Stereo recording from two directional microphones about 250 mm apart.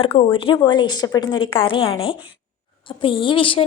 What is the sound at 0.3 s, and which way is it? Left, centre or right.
A woman's voice, centre.